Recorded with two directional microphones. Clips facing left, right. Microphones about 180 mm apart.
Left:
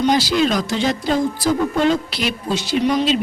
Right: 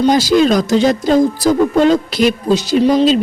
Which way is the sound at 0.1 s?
45° right (ahead or behind).